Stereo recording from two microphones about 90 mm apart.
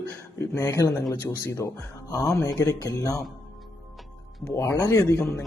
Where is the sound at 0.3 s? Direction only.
35° left (ahead or behind).